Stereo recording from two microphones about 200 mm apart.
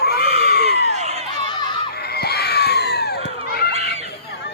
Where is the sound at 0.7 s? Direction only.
35° right (ahead or behind).